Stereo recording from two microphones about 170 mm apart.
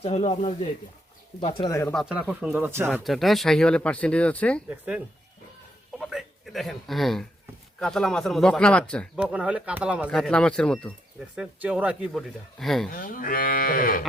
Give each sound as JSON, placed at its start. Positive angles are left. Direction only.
{"t": 0.0, "sound": "speech", "side_deg": 40}
{"t": 1.9, "sound": "speech", "side_deg": 0}
{"t": 2.9, "sound": "speech", "side_deg": 0}
{"t": 4.7, "sound": "a man's voice", "side_deg": -5}
{"t": 9.1, "sound": "speech", "side_deg": -5}
{"t": 10.1, "sound": "speech", "side_deg": 5}
{"t": 11.3, "sound": "speech", "side_deg": -5}
{"t": 12.9, "sound": "moo", "side_deg": 55}